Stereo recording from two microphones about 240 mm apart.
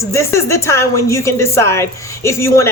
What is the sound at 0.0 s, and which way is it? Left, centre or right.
A woman's voice, centre.